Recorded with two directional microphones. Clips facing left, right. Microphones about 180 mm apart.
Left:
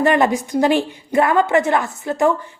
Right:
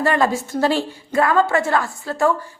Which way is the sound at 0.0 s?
20° left (ahead or behind).